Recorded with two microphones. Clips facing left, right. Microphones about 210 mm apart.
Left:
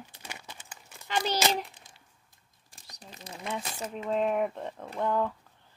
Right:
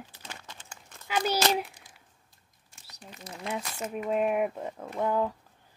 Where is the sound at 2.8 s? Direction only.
35° left (ahead or behind).